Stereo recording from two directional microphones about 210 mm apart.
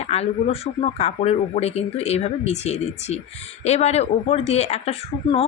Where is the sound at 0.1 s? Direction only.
30° left (ahead or behind).